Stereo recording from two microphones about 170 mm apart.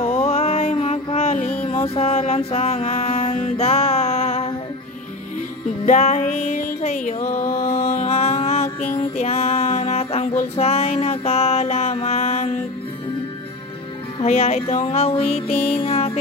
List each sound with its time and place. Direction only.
0.0 s music: 35° left (ahead or behind)
5.9 s music: 45° left (ahead or behind)
14.2 s music: 40° left (ahead or behind)